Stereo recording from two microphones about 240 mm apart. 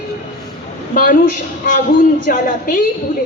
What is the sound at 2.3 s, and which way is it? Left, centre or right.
Speech, left.